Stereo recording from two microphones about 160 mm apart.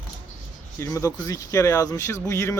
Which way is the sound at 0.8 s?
20° left (ahead or behind).